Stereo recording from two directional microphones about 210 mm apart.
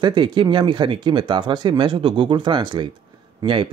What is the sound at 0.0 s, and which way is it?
Speech, 20° right (ahead or behind).